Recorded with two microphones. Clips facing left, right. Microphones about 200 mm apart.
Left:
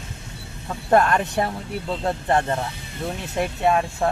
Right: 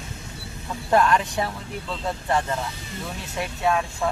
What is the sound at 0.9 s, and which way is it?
Speech, 55° left (ahead or behind).